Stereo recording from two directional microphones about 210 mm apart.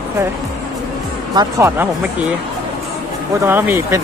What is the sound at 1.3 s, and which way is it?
Speech, 15° right (ahead or behind).